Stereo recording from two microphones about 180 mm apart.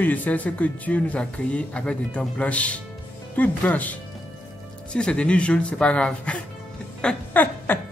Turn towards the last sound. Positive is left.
turn(degrees=5)  # may be behind; listen again after turning